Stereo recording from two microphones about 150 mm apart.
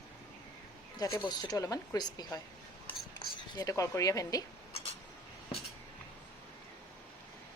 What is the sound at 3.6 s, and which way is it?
Speech, 20° left (ahead or behind).